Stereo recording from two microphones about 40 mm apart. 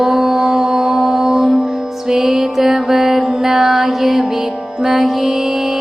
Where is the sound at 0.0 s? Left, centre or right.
Centre.